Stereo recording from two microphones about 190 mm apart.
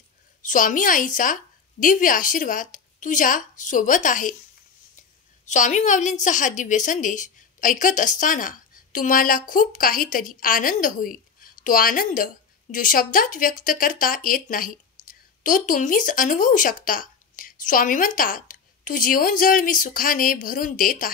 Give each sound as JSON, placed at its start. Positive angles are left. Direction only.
{"t": 0.4, "sound": "a woman's voice", "side_deg": 45}
{"t": 5.4, "sound": "a woman's voice", "side_deg": 40}